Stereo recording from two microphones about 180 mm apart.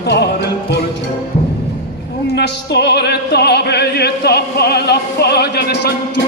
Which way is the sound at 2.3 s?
70° left (ahead or behind).